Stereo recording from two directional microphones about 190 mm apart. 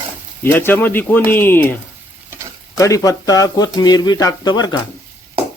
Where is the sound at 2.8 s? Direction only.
15° left (ahead or behind).